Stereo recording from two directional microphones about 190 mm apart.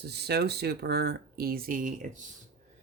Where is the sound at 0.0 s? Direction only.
60° right (ahead or behind).